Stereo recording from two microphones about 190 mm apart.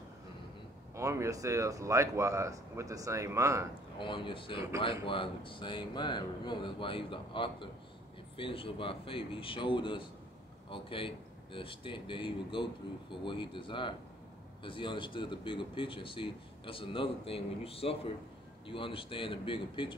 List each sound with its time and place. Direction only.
0.9 s speech: 15° right (ahead or behind)
4.0 s speech: 25° left (ahead or behind)